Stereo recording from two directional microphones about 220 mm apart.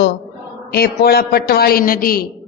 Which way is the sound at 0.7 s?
45° left (ahead or behind).